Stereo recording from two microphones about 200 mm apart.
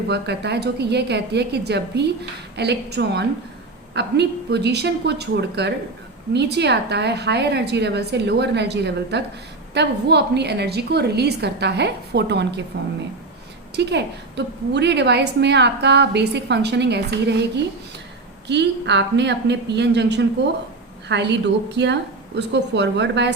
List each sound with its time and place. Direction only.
0.1 s a woman's voice: 55° right (ahead or behind)
18.4 s a woman's voice: 60° right (ahead or behind)